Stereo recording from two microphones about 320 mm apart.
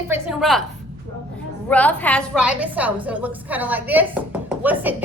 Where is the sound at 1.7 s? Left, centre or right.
Centre.